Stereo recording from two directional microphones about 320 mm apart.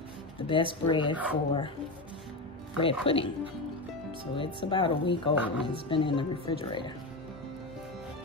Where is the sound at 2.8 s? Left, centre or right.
Centre.